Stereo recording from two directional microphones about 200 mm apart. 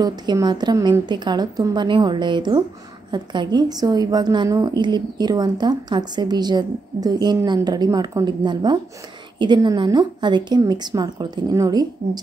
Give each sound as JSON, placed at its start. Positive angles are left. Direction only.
{"t": 0.0, "sound": "a woman's voice", "side_deg": -20}